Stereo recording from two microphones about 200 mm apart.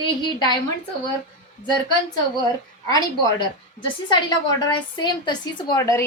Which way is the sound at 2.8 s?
20° left (ahead or behind).